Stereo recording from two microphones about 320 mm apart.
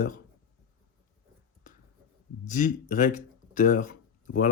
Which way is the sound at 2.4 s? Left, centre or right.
Left.